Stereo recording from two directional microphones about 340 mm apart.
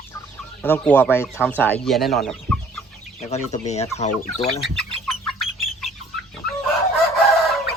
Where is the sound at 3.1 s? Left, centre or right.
Centre.